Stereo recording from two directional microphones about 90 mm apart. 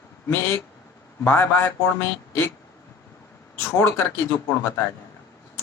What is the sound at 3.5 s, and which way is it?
Speech, 30° left (ahead or behind).